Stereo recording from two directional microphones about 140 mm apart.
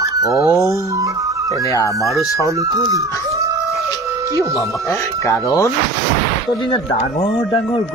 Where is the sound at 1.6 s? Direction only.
25° left (ahead or behind).